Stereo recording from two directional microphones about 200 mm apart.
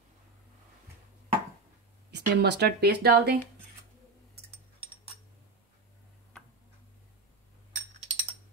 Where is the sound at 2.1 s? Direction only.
55° right (ahead or behind).